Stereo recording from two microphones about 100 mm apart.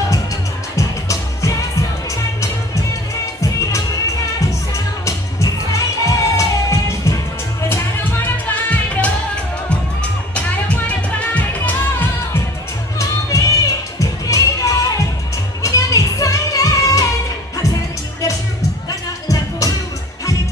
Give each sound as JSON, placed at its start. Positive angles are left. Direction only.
{"t": 0.7, "sound": "music", "side_deg": 30}
{"t": 4.4, "sound": "music", "side_deg": 30}
{"t": 7.7, "sound": "music", "side_deg": 20}
{"t": 11.3, "sound": "music", "side_deg": 15}
{"t": 13.0, "sound": "music", "side_deg": 35}
{"t": 18.9, "sound": "music", "side_deg": 35}